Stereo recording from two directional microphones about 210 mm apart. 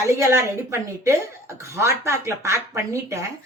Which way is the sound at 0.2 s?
15° right (ahead or behind).